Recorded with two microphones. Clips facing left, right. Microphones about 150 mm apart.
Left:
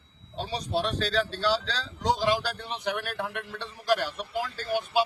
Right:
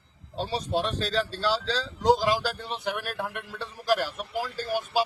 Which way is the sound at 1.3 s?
40° right (ahead or behind).